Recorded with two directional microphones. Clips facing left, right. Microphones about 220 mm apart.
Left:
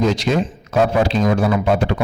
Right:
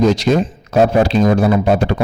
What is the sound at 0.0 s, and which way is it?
Speech, 40° right (ahead or behind).